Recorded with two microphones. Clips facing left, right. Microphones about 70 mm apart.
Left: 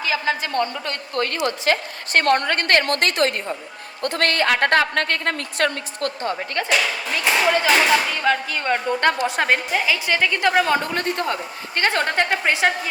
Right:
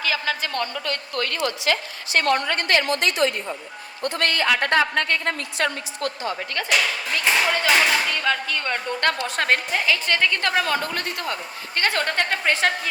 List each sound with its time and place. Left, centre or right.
0.0 s a woman's voice: left
1.5 s a woman's voice: left
6.7 s a woman's voice: centre